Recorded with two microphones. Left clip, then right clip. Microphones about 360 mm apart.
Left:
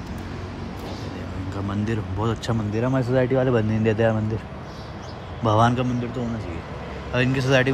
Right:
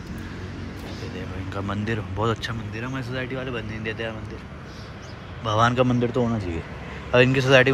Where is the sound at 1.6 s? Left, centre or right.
Centre.